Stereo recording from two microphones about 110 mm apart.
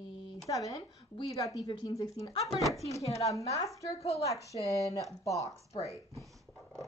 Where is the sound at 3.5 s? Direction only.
30° left (ahead or behind).